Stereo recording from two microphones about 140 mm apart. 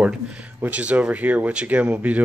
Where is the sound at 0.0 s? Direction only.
10° right (ahead or behind).